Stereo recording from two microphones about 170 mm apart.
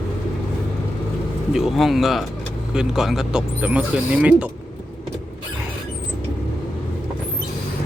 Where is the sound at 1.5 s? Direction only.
Centre (ahead or behind).